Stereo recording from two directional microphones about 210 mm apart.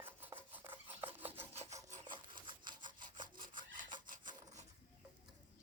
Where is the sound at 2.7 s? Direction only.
40° right (ahead or behind).